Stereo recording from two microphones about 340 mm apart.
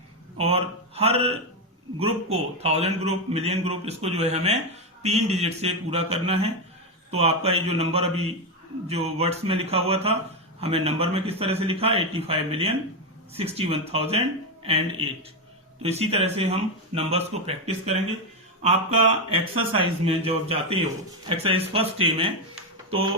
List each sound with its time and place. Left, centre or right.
0.3 s a man's voice: centre